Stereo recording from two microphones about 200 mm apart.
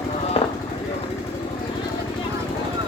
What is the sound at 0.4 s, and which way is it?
Vehicle, 30° left (ahead or behind).